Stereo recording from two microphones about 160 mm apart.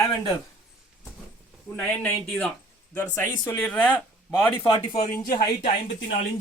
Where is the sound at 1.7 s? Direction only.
10° left (ahead or behind).